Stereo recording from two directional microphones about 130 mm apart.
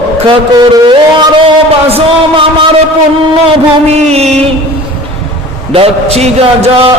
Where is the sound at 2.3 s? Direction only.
40° right (ahead or behind).